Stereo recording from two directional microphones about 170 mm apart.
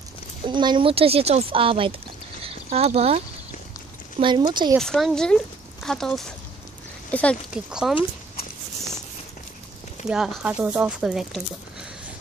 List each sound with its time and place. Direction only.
0.5 s speech: 25° right (ahead or behind)
2.4 s a sound: 35° right (ahead or behind)
4.2 s speech: 25° right (ahead or behind)
4.7 s speech: 5° left (ahead or behind)
7.5 s speech: 5° right (ahead or behind)
10.0 s speech: 5° right (ahead or behind)